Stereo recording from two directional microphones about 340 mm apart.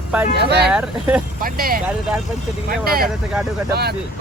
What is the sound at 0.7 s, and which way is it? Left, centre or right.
Speech, centre.